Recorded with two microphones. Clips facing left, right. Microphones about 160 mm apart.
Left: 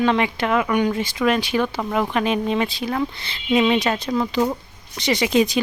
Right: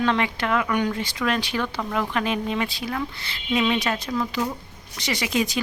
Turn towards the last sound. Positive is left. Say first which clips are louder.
# left 6 dB
turn(degrees=25)  # may be behind; listen again after turning